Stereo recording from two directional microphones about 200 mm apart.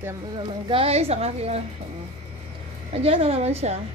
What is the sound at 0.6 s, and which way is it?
Speech, 30° right (ahead or behind).